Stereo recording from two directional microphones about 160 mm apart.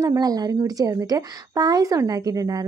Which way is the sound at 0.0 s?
25° right (ahead or behind).